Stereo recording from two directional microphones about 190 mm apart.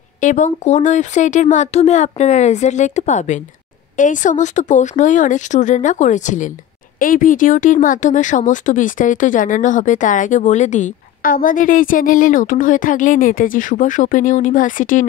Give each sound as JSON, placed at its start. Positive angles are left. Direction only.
{"t": 0.2, "sound": "speech", "side_deg": 40}